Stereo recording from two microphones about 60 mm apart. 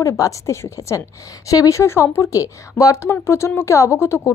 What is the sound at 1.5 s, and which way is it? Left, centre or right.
Speech, left.